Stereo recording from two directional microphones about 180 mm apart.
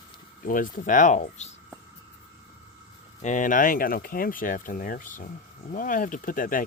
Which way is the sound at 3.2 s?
45° left (ahead or behind).